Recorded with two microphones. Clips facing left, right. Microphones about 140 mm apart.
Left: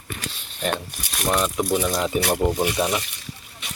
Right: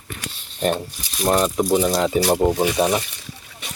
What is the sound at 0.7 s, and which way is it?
Speech, 65° left (ahead or behind).